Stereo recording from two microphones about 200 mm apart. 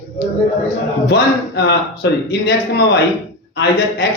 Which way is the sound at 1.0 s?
55° left (ahead or behind).